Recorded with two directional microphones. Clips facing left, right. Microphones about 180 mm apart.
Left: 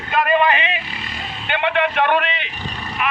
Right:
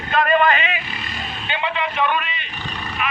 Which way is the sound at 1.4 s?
60° left (ahead or behind).